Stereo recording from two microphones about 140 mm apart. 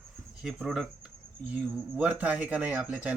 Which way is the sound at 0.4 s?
Centre (ahead or behind).